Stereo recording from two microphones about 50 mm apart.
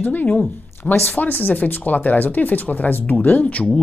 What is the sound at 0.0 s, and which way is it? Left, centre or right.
Speech, left.